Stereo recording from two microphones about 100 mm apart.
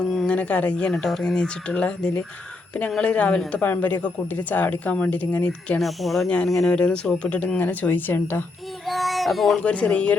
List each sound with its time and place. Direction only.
0.0 s a woman's voice: 5° left (ahead or behind)
5.8 s a woman's voice: centre (ahead or behind); by 8.4 s 20° left (ahead or behind)
8.9 s child singing: centre (ahead or behind)
9.6 s a woman's voice: 10° left (ahead or behind)